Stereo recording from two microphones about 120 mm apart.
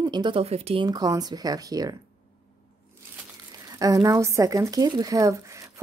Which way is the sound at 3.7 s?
30° right (ahead or behind).